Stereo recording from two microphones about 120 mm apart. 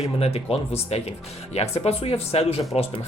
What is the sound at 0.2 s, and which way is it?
Speech, 55° left (ahead or behind).